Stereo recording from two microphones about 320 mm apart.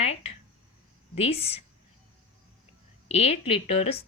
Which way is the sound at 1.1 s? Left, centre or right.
Centre.